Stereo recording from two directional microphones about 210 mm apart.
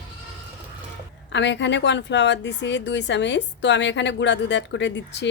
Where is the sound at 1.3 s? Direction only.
55° left (ahead or behind).